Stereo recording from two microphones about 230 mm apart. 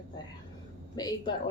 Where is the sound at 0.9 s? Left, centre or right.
Centre.